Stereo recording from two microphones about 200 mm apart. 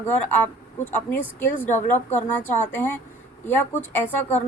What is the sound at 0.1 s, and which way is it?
A woman's voice, 10° left (ahead or behind).